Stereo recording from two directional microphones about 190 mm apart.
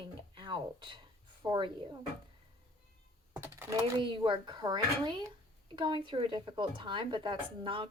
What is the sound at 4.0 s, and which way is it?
A woman's voice, 25° right (ahead or behind).